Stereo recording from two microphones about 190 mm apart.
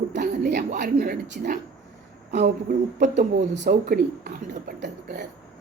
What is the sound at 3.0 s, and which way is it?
Speech, 40° right (ahead or behind).